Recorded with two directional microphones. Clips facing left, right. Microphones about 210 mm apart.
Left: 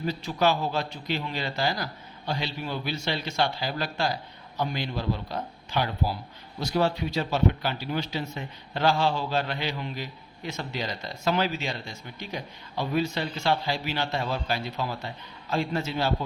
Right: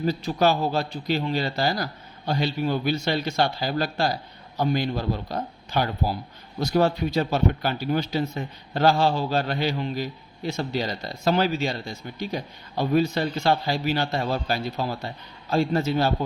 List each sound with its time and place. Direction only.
0.0 s a man's voice: 40° right (ahead or behind)